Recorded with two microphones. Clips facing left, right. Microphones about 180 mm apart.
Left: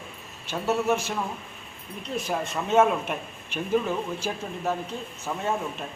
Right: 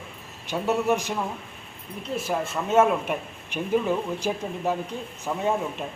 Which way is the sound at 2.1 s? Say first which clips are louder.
Right 1 dB; 5° right (ahead or behind).